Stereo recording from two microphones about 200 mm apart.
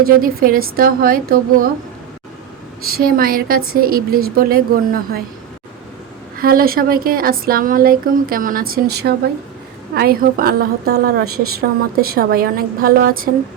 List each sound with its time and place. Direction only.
0.0 s speech: 45° right (ahead or behind)
2.8 s speech: 50° right (ahead or behind)
6.3 s speech: 45° right (ahead or behind)